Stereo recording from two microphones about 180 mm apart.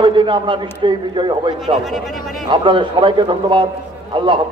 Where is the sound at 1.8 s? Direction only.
Centre (ahead or behind).